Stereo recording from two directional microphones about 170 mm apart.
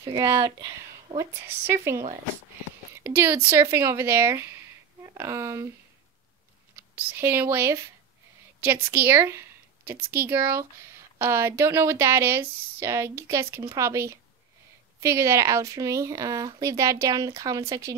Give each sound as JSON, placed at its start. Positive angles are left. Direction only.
{"t": 0.0, "sound": "speech", "side_deg": -25}
{"t": 3.4, "sound": "a woman's voice", "side_deg": -15}
{"t": 7.0, "sound": "speech", "side_deg": -10}
{"t": 8.9, "sound": "speech", "side_deg": -15}